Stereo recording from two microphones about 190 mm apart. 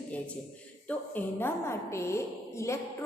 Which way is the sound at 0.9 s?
10° left (ahead or behind).